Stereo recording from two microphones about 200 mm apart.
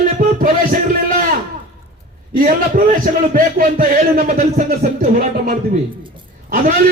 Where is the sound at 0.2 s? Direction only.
40° right (ahead or behind).